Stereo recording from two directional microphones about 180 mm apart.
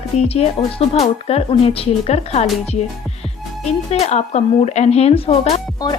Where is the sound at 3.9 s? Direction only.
35° left (ahead or behind).